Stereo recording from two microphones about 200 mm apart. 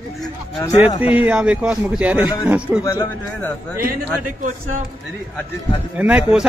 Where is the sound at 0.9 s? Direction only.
25° left (ahead or behind).